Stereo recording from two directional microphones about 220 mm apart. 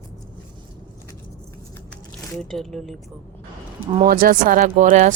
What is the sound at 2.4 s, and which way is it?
Speech, centre (ahead or behind).